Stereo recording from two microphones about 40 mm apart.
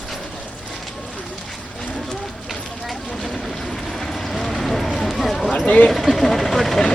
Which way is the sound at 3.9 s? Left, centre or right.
Centre.